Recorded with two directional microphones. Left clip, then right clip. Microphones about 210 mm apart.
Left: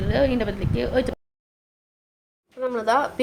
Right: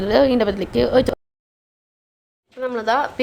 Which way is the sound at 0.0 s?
30° right (ahead or behind).